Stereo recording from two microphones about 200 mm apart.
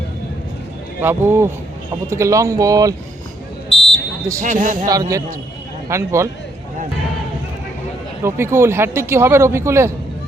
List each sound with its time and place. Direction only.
1.0 s speech: 10° right (ahead or behind)
3.7 s fire alarm: 65° left (ahead or behind)
4.4 s speech: 40° right (ahead or behind)
4.9 s speech: 15° right (ahead or behind)
8.2 s speech: 15° right (ahead or behind)